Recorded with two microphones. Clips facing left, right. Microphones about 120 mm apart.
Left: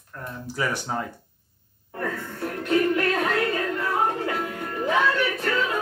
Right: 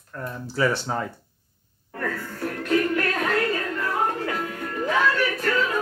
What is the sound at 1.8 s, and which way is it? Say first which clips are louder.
Music: even; 20° left (ahead or behind).